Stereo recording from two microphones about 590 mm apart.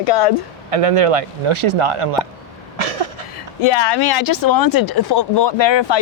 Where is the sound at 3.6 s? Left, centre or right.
Left.